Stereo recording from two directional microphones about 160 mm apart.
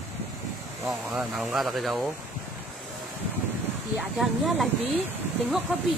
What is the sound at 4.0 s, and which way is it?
Speech, centre (ahead or behind).